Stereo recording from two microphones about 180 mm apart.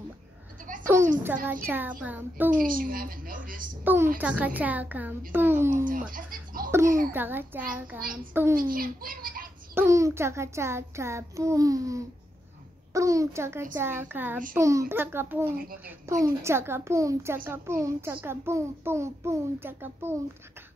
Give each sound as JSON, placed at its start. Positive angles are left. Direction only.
{"t": 0.9, "sound": "a child's voice", "side_deg": -15}
{"t": 2.5, "sound": "a woman's voice", "side_deg": -50}
{"t": 3.8, "sound": "a child's voice", "side_deg": -10}
{"t": 6.1, "sound": "a sound", "side_deg": -50}
{"t": 6.7, "sound": "a child's voice", "side_deg": -15}
{"t": 8.0, "sound": "a woman's voice", "side_deg": -50}
{"t": 8.3, "sound": "a child's voice", "side_deg": -10}
{"t": 8.5, "sound": "a child's voice", "side_deg": -50}
{"t": 9.8, "sound": "a child's voice", "side_deg": -15}
{"t": 15.4, "sound": "speech", "side_deg": -55}
{"t": 16.1, "sound": "a child's voice", "side_deg": -15}